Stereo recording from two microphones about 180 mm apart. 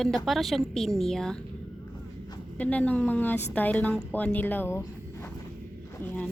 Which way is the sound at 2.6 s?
10° left (ahead or behind).